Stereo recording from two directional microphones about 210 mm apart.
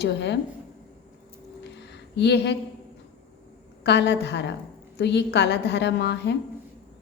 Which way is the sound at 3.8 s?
55° left (ahead or behind).